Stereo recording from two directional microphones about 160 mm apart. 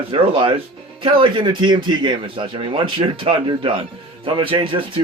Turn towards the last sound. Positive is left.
turn(degrees=-30)  # may be behind; listen again after turning